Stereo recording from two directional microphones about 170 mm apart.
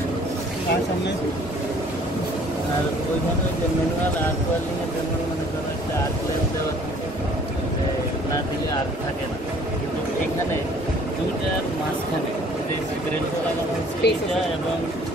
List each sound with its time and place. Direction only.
14.0 s speech: 85° left